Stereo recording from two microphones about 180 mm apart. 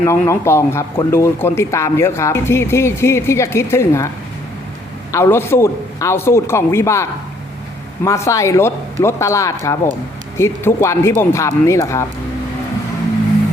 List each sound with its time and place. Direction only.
0.0 s speech: 15° left (ahead or behind)
5.1 s speech: 15° left (ahead or behind)